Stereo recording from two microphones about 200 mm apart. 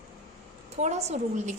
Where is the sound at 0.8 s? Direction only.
35° right (ahead or behind).